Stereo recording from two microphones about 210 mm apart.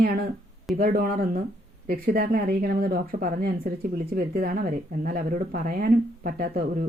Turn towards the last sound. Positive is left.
turn(degrees=-45)  # may be behind; listen again after turning